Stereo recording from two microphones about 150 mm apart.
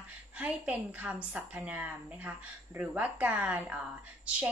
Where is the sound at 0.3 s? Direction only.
10° right (ahead or behind).